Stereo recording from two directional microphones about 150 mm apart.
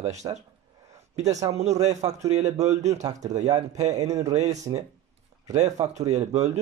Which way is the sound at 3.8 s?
50° right (ahead or behind).